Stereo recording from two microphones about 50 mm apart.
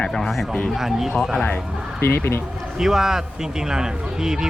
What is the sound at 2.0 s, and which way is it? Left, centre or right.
Speech, left.